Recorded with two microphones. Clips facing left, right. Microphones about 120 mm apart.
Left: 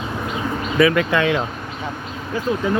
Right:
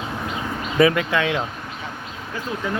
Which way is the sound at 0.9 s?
10° right (ahead or behind).